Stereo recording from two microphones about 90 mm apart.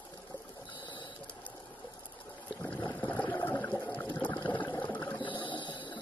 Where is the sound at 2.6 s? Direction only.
20° left (ahead or behind).